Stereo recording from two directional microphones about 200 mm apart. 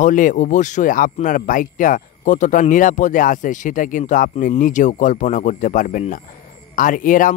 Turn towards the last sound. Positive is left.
turn(degrees=40)  # may be behind; listen again after turning